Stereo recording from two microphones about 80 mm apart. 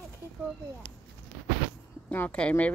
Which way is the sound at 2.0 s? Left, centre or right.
Centre.